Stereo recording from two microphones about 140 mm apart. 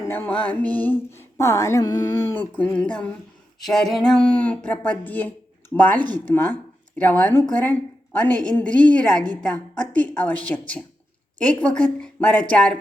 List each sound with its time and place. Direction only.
0.1 s music: 10° left (ahead or behind)
6.1 s speech: 15° left (ahead or behind)
8.4 s music: 10° left (ahead or behind)